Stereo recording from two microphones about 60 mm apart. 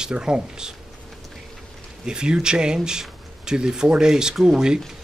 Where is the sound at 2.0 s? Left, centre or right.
Centre.